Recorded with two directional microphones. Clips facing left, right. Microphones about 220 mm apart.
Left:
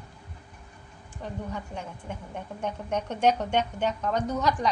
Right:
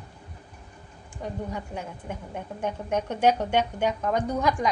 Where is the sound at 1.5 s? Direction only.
10° right (ahead or behind).